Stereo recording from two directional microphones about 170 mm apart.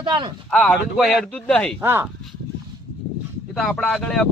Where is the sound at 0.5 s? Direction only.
Centre (ahead or behind).